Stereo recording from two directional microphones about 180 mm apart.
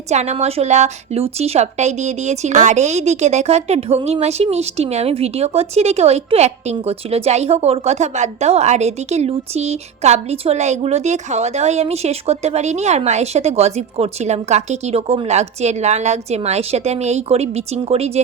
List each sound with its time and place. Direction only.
0.1 s a woman's voice: 40° right (ahead or behind)